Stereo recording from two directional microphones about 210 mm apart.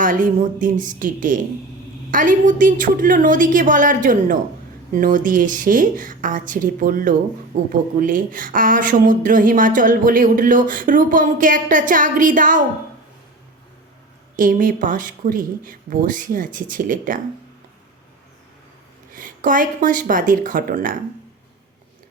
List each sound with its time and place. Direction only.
0.0 s speech: 40° right (ahead or behind)
14.3 s speech: 40° right (ahead or behind)
19.1 s speech: 40° right (ahead or behind)